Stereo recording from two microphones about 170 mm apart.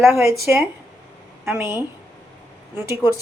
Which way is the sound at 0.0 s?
15° right (ahead or behind).